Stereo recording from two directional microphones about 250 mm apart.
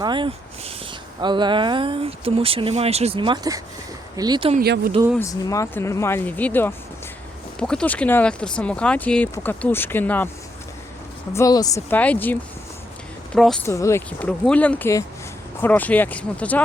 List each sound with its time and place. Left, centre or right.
0.0 s speech: centre
4.6 s speech: right
5.2 s speech: centre
11.3 s speech: centre